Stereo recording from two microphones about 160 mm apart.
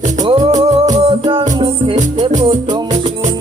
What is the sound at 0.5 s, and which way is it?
Music, 25° right (ahead or behind).